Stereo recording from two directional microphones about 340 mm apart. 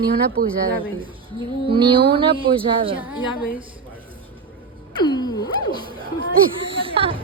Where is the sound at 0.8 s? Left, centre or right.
Centre.